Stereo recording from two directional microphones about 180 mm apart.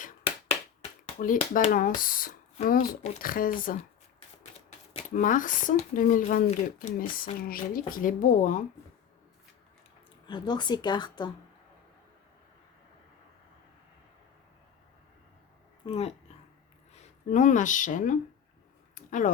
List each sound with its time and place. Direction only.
1.2 s speech: 50° left (ahead or behind)
5.1 s speech: 45° left (ahead or behind)
10.2 s a woman's voice: 25° left (ahead or behind)
15.9 s speech: 35° left (ahead or behind)
18.9 s a sound: 45° left (ahead or behind)